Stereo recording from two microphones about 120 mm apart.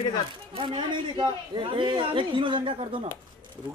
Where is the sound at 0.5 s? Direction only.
40° right (ahead or behind).